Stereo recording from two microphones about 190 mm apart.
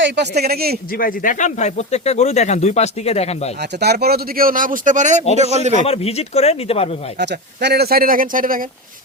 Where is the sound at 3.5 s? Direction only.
60° right (ahead or behind); by 5.7 s 35° right (ahead or behind).